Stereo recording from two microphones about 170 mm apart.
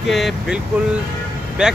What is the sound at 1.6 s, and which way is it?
Speech, 5° right (ahead or behind).